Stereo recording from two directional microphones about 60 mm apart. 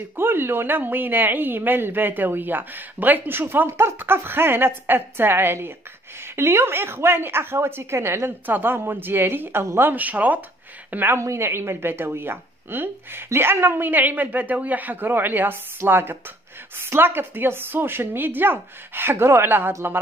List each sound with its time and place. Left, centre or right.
0.1 s a woman's voice: right
11.1 s speech: right